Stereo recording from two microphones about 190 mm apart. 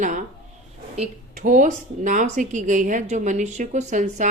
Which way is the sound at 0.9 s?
40° right (ahead or behind).